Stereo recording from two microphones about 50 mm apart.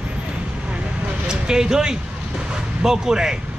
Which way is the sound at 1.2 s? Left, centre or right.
Centre.